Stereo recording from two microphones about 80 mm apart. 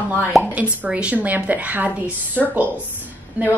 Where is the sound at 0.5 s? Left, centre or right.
Centre.